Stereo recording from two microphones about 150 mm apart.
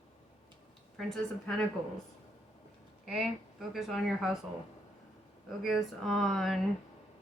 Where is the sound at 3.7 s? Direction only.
Centre (ahead or behind).